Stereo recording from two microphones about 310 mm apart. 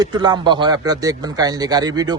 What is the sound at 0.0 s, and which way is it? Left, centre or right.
Speech, centre.